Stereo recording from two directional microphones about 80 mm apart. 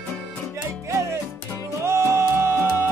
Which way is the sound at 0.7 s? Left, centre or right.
Right.